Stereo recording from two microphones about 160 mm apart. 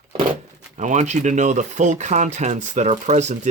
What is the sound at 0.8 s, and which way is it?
Speech, 50° right (ahead or behind).